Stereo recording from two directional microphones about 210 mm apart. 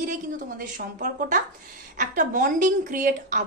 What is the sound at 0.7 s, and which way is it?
A woman's voice, 40° right (ahead or behind).